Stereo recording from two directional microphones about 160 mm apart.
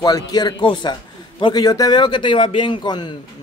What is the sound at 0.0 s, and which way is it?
A man's voice, 25° left (ahead or behind).